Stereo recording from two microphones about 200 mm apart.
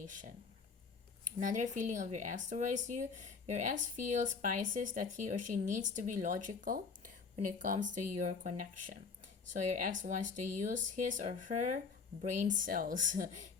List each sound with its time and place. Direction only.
0.0 s speech: 40° right (ahead or behind)